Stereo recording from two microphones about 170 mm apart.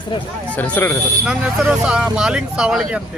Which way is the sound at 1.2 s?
5° right (ahead or behind).